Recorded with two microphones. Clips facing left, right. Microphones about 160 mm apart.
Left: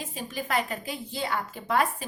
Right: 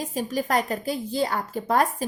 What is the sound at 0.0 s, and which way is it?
A woman's voice, 40° right (ahead or behind).